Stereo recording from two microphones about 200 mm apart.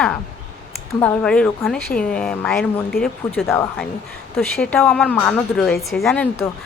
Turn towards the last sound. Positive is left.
turn(degrees=10)  # may be behind; listen again after turning